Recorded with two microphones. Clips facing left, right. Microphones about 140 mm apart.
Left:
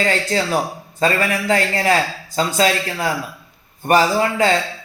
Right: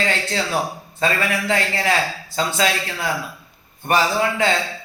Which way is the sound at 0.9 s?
40° left (ahead or behind).